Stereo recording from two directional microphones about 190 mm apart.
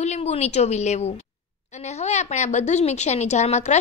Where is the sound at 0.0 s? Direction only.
35° left (ahead or behind).